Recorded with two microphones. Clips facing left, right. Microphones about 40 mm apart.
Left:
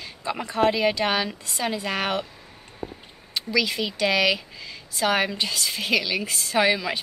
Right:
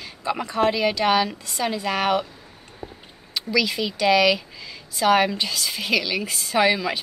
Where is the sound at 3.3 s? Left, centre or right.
Centre.